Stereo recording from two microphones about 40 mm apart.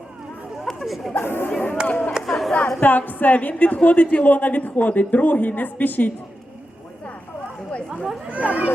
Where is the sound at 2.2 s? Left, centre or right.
Centre.